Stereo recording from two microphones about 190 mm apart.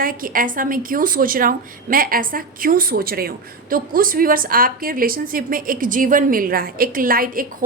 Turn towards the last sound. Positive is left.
turn(degrees=-50)  # may be behind; listen again after turning